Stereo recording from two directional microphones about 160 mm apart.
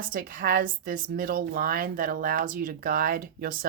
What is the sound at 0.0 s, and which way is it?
A woman's voice, 60° right (ahead or behind).